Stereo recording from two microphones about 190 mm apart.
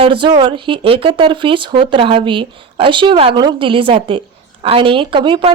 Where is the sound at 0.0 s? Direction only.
25° right (ahead or behind).